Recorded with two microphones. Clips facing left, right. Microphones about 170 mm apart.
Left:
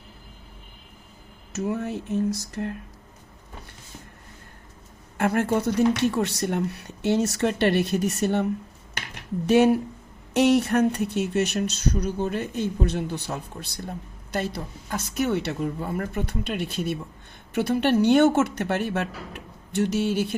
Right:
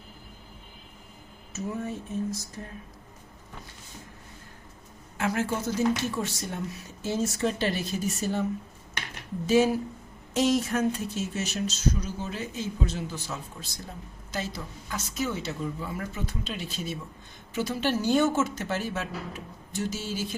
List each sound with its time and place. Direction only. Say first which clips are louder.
1.5 s a sound: left 5 dB; 70° left (ahead or behind)
5.1 s speech: left 6 dB; 60° left (ahead or behind)
9.5 s speech: left 4 dB; 65° left (ahead or behind)